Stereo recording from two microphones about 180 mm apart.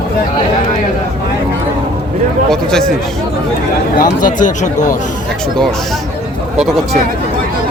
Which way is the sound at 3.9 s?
45° left (ahead or behind).